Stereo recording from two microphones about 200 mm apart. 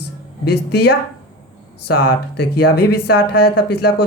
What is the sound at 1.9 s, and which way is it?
Mantra, 55° left (ahead or behind).